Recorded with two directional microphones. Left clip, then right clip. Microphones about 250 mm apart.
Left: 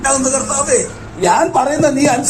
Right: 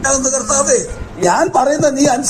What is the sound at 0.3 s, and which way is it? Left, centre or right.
A man's voice, right.